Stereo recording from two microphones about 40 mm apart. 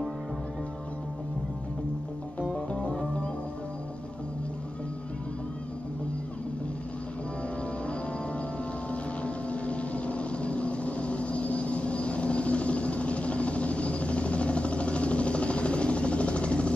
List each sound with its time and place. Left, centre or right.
2.5 s music: left
9.2 s vehicle: left